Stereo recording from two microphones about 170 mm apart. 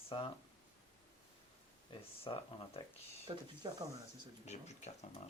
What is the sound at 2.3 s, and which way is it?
Speech, 30° left (ahead or behind).